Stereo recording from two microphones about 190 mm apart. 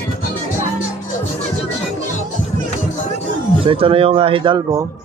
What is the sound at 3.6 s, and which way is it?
A man's voice, 30° right (ahead or behind).